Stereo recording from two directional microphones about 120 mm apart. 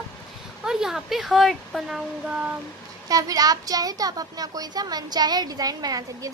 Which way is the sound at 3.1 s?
30° right (ahead or behind).